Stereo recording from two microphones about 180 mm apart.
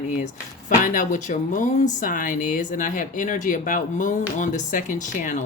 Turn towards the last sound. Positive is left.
turn(degrees=45)  # may be behind; listen again after turning